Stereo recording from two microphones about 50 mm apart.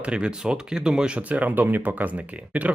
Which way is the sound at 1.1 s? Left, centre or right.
Right.